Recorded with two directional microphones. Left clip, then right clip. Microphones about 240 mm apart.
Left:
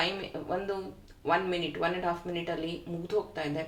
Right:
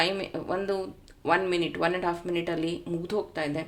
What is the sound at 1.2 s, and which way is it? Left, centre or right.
A woman's voice, right.